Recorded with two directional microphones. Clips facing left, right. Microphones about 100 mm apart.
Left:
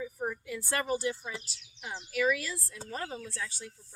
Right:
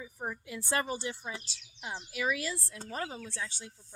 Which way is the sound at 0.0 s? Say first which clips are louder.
Left 4 dB; 20° right (ahead or behind).